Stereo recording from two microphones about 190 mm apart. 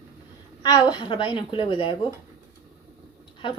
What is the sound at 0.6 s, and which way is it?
Speech, 20° left (ahead or behind).